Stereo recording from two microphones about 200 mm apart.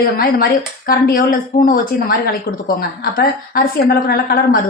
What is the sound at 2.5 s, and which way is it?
Speech, 55° left (ahead or behind).